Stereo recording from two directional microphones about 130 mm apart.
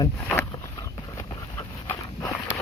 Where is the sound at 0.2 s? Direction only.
15° left (ahead or behind).